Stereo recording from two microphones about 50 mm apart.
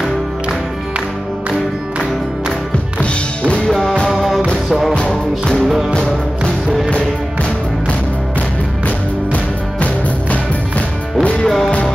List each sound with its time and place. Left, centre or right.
3.0 s music: left
3.6 s music: centre
4.1 s music: centre
4.9 s music: left
8.8 s music: left
11.4 s music: centre